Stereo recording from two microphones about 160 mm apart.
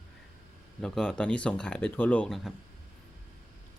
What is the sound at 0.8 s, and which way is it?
Speech, 5° left (ahead or behind).